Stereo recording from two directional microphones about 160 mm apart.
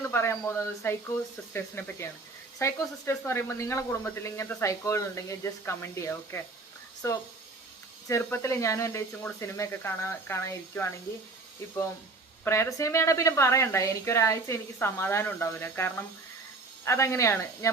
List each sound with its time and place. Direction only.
0.0 s a woman's voice: 15° left (ahead or behind)
12.5 s a woman's voice: 20° left (ahead or behind)